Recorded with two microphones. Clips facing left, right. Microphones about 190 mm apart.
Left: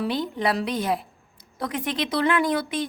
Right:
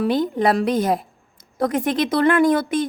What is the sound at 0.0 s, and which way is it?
A woman's voice, 50° right (ahead or behind).